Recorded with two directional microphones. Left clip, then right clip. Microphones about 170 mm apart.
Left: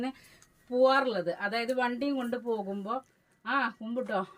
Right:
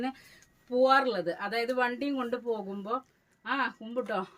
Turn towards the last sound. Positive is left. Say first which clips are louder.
# even
turn(degrees=-20)  # may be behind; listen again after turning